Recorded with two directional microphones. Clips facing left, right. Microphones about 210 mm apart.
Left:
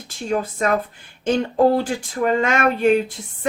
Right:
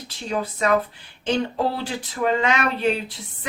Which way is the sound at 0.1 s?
45° left (ahead or behind).